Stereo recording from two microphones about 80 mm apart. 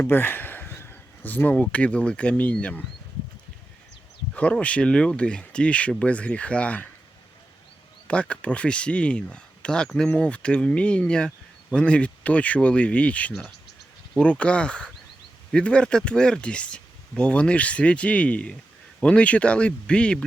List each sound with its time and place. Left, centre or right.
0.0 s speech: left
4.4 s speech: centre
8.0 s speech: centre